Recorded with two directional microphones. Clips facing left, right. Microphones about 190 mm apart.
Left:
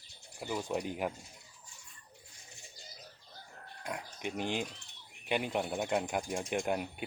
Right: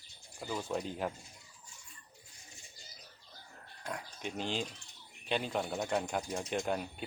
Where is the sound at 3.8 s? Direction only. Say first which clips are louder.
Left 2 dB; 15° left (ahead or behind).